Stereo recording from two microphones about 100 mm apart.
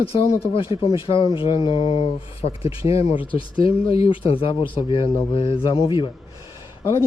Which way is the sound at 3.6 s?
70° left (ahead or behind).